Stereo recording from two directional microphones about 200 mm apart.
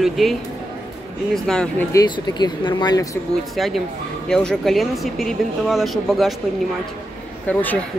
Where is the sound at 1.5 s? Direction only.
Centre (ahead or behind).